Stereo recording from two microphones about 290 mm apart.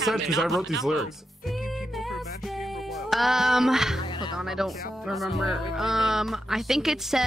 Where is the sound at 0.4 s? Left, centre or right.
Centre.